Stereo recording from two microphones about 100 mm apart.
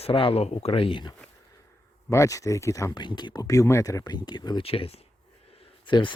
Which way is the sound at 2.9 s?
50° left (ahead or behind).